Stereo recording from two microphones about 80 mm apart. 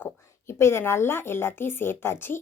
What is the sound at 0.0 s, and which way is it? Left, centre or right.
A woman's voice, left.